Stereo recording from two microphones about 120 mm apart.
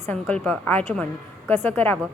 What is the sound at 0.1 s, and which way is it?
A woman's voice, 15° left (ahead or behind).